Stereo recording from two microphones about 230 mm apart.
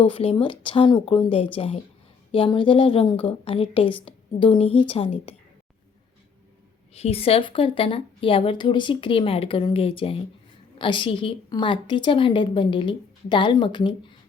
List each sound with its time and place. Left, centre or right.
0.0 s a woman's voice: left
6.9 s a woman's voice: left